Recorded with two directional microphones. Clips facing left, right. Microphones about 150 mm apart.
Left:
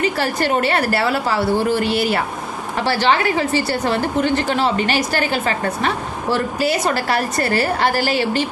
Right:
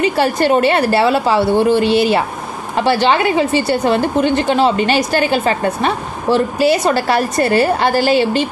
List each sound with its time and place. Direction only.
0.0 s a woman's voice: 20° right (ahead or behind)